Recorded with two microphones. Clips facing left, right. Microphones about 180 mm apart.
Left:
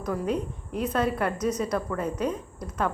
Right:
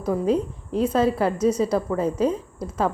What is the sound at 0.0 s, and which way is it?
A woman's voice, 30° right (ahead or behind).